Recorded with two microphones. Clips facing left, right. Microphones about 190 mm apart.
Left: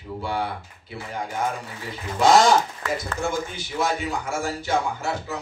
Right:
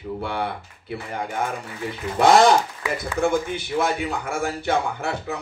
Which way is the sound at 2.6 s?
10° right (ahead or behind).